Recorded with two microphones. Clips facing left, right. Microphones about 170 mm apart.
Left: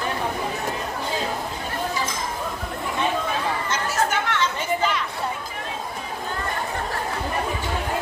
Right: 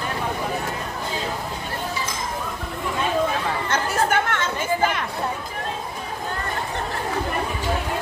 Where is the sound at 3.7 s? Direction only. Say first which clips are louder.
Right 4 dB; 55° right (ahead or behind).